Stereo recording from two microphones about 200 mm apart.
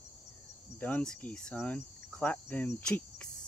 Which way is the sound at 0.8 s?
10° left (ahead or behind).